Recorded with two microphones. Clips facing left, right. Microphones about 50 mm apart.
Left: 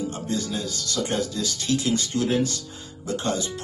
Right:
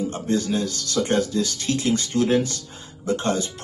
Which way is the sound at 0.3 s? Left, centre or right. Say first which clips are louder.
Right 8 dB; right.